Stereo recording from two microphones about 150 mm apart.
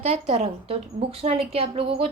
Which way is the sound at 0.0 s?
40° right (ahead or behind).